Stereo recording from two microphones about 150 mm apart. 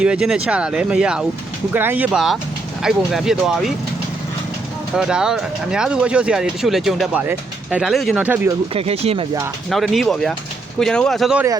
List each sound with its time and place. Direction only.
0.0 s speech: 5° right (ahead or behind)
2.1 s speech: centre (ahead or behind)
4.9 s speech: 5° right (ahead or behind)
8.7 s speech: 40° right (ahead or behind)
9.6 s speech: centre (ahead or behind)